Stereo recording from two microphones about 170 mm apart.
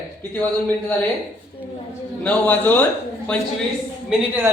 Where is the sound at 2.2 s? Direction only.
10° left (ahead or behind).